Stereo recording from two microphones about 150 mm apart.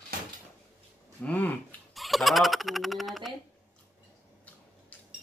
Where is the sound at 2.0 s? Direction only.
Centre (ahead or behind).